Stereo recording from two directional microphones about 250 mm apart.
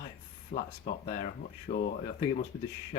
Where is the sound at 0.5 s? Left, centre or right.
Left.